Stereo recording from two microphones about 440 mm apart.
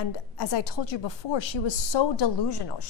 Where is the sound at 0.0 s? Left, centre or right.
Left.